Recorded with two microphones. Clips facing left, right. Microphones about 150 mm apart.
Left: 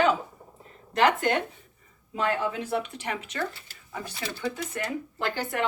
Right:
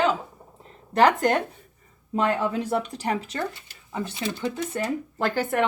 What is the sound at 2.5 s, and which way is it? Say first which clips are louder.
Speech: right 4 dB; 40° right (ahead or behind).